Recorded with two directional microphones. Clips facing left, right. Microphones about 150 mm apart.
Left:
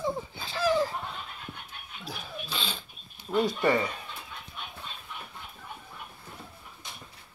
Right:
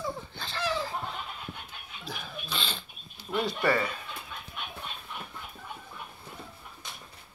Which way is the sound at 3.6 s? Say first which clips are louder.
Right 1 dB; 20° left (ahead or behind).